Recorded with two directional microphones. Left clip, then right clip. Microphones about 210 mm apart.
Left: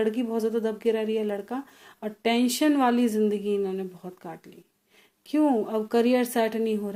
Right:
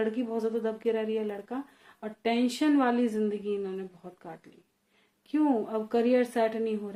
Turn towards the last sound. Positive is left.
turn(degrees=40)  # may be behind; listen again after turning